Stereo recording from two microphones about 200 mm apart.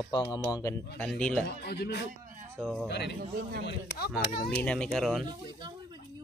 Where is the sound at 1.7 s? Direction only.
55° left (ahead or behind).